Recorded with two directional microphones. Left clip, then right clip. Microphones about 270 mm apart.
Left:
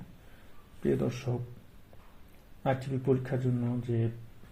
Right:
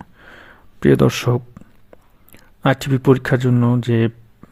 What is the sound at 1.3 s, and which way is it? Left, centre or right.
Speech, right.